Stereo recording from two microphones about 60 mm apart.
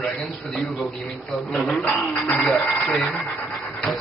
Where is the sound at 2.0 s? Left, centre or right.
Centre.